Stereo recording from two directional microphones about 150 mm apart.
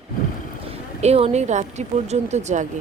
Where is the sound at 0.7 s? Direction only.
45° right (ahead or behind).